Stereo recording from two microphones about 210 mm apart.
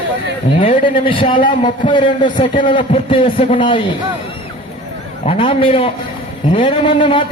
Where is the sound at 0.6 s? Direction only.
30° left (ahead or behind).